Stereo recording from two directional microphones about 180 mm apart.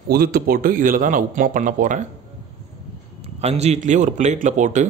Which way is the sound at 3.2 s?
35° right (ahead or behind).